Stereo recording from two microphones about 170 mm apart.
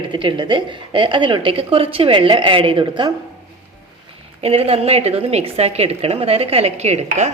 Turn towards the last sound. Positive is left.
turn(degrees=-40)  # may be behind; listen again after turning